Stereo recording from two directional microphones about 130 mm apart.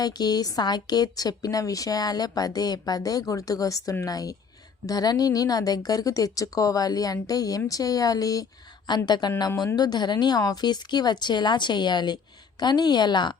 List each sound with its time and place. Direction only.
0.0 s a woman's voice: 30° left (ahead or behind)